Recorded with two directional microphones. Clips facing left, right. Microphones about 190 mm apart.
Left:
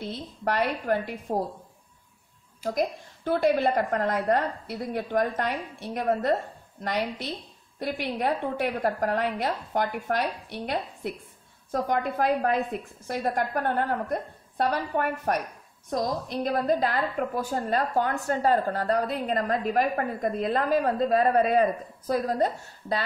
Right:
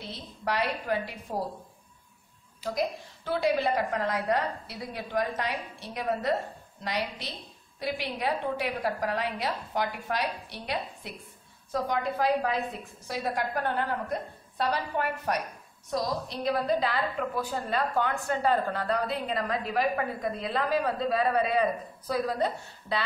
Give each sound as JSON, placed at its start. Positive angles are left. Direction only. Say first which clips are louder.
{"t": 0.0, "sound": "a woman's voice", "louder": "left 5 dB", "side_deg": 50}
{"t": 2.6, "sound": "a woman's voice", "louder": "left 3 dB", "side_deg": 50}